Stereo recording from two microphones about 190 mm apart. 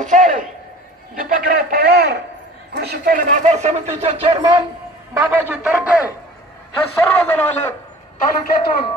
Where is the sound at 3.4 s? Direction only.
35° right (ahead or behind).